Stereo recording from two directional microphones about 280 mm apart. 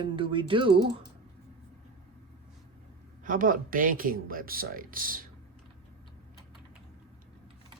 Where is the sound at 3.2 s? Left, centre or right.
Right.